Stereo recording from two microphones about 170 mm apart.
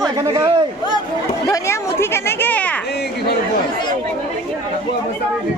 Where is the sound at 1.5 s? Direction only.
15° left (ahead or behind).